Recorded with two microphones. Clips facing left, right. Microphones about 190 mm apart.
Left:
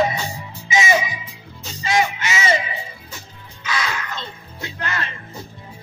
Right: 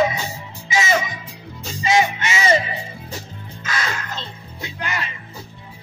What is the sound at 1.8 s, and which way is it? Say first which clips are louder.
Music: right 2 dB; 20° right (ahead or behind).